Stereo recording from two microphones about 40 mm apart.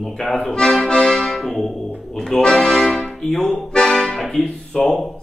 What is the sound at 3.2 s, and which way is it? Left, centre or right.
Music, centre.